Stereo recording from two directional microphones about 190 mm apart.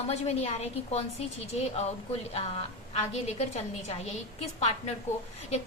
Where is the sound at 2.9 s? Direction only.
35° left (ahead or behind).